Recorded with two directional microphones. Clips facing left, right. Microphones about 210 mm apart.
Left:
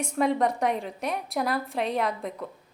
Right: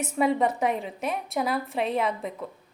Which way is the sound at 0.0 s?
5° right (ahead or behind).